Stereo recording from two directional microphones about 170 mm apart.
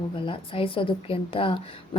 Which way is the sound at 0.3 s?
30° left (ahead or behind).